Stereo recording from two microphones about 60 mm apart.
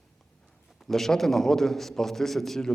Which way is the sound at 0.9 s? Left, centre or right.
Centre.